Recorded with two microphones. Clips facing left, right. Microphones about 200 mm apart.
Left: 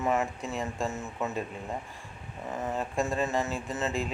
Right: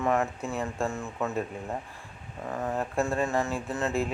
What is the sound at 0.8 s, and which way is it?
Speech, 20° left (ahead or behind).